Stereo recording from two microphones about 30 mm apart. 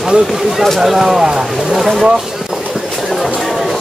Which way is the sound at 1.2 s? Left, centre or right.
Right.